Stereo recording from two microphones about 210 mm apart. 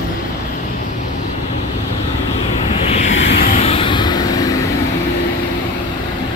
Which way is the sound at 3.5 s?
30° left (ahead or behind).